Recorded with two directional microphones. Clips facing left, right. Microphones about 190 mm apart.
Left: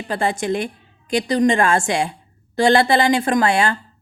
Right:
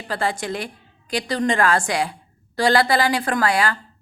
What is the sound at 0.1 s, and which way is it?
A woman's voice, 20° left (ahead or behind).